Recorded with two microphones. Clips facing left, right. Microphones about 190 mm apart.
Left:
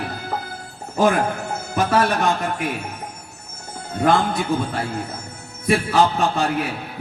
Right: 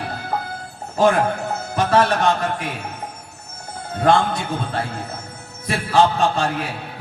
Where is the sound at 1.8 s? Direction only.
25° right (ahead or behind).